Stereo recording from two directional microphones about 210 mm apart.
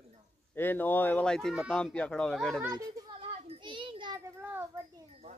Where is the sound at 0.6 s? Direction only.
10° left (ahead or behind).